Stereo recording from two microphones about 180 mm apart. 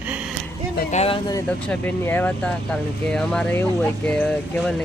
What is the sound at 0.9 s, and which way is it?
Speech, 35° left (ahead or behind).